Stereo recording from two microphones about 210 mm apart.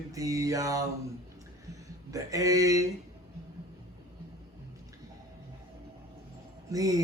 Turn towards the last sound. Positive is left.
turn(degrees=-15)  # may be behind; listen again after turning